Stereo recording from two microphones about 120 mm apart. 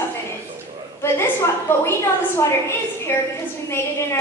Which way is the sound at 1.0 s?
20° left (ahead or behind).